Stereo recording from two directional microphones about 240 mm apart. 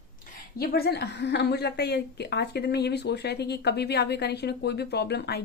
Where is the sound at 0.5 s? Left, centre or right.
Left.